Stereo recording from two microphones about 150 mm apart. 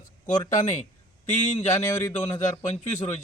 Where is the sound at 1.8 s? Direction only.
20° left (ahead or behind).